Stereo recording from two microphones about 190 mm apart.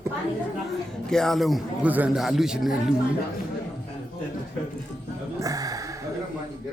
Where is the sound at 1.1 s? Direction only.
5° left (ahead or behind).